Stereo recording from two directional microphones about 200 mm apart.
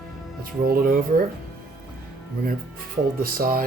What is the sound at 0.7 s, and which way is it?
Speech, 50° right (ahead or behind).